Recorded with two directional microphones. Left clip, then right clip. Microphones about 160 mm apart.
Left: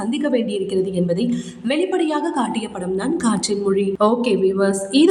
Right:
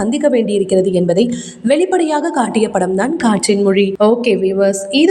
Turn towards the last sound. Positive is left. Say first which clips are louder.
# right 4 dB
turn(degrees=-15)  # may be behind; listen again after turning